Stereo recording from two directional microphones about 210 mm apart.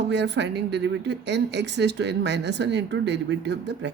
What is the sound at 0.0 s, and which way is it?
Speech, 55° right (ahead or behind).